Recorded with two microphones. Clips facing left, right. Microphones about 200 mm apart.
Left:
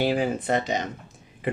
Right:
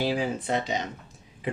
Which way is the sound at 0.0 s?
55° left (ahead or behind).